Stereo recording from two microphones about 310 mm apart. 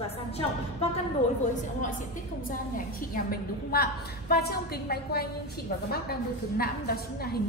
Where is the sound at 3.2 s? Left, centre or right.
Left.